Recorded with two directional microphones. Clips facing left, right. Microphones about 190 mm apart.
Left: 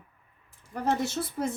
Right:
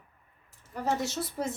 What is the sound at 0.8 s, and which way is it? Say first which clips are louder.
Speech: left 2 dB; 55° left (ahead or behind).